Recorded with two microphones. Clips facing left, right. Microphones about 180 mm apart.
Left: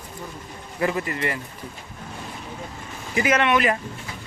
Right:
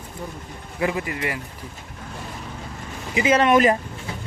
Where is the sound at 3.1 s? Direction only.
25° right (ahead or behind).